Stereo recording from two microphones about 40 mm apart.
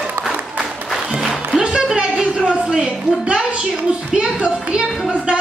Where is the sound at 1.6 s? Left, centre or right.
Right.